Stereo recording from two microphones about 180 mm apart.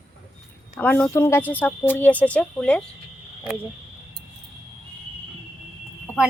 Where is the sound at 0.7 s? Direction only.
10° left (ahead or behind).